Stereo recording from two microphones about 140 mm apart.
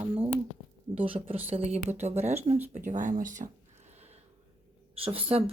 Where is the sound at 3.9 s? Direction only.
50° right (ahead or behind).